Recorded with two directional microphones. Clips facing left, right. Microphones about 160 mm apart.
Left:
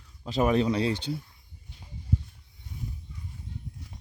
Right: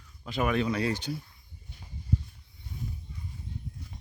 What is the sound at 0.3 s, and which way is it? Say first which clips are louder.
Speech: left 4 dB; 35° left (ahead or behind).